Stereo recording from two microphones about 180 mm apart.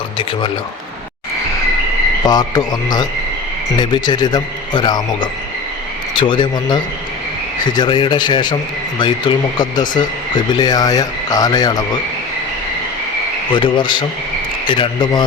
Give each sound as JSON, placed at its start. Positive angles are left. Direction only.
{"t": 2.2, "sound": "frog", "side_deg": 20}
{"t": 7.8, "sound": "frog", "side_deg": 25}
{"t": 13.5, "sound": "frog", "side_deg": 25}